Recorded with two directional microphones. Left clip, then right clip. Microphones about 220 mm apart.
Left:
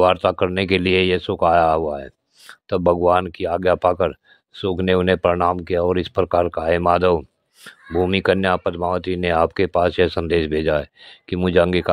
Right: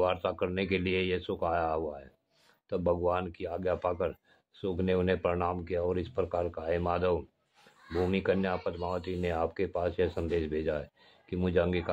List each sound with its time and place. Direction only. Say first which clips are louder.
0.0 s speech: left 13 dB; 45° left (ahead or behind)